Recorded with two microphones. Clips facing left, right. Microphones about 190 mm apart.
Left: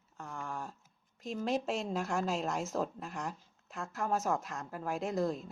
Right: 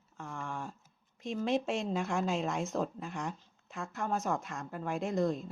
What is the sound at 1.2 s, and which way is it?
Speech, centre (ahead or behind).